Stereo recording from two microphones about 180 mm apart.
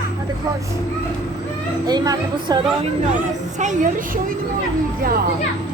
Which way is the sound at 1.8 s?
20° right (ahead or behind).